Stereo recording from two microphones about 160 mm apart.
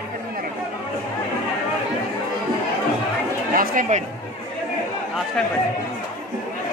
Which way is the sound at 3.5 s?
65° right (ahead or behind).